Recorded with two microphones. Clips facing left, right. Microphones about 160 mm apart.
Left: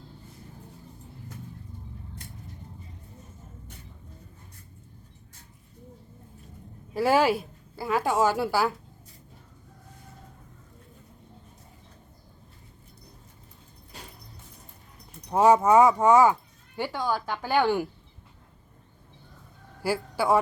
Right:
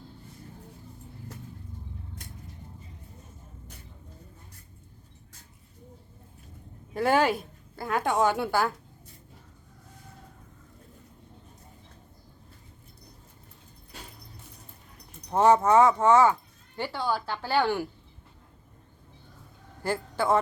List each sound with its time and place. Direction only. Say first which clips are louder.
6.9 s a woman's voice: left 2 dB; 5° left (ahead or behind)
15.3 s speech: left 1 dB; 10° left (ahead or behind)
19.8 s speech: left 1 dB; 10° left (ahead or behind)